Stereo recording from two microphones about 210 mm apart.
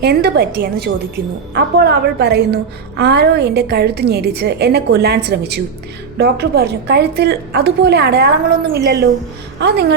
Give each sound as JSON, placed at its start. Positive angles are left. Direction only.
{"t": 0.0, "sound": "a woman's voice", "side_deg": -50}